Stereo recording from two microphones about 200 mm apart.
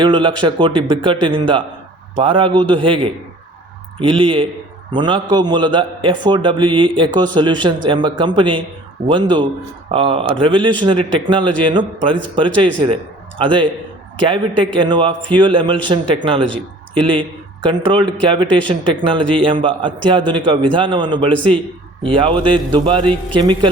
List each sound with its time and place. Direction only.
0.0 s a man's voice: 25° right (ahead or behind)